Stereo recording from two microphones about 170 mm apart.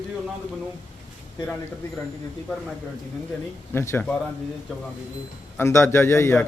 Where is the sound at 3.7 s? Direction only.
15° left (ahead or behind).